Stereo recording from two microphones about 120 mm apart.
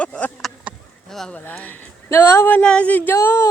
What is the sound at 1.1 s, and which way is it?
Speech, 5° left (ahead or behind).